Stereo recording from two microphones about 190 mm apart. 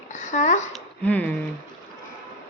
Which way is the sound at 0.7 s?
5° left (ahead or behind).